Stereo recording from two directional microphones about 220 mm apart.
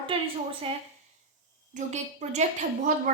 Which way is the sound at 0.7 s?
25° right (ahead or behind).